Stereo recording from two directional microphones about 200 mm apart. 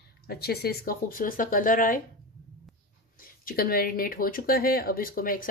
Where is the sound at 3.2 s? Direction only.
45° left (ahead or behind).